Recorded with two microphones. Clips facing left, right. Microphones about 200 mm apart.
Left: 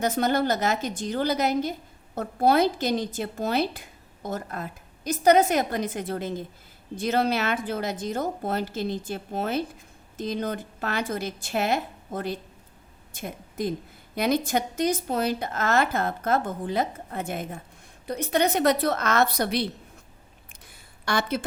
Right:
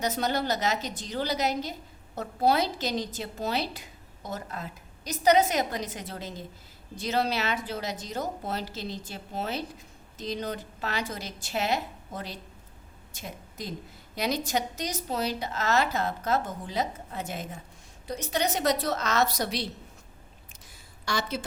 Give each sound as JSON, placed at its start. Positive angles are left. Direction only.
{"t": 0.0, "sound": "a woman's voice", "side_deg": 50}
{"t": 21.0, "sound": "a woman's voice", "side_deg": 55}